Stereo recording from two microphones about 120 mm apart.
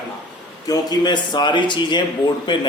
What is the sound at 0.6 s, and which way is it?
Speech, 30° left (ahead or behind).